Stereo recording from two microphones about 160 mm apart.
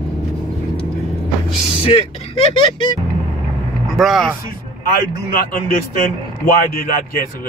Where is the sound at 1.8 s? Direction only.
40° left (ahead or behind).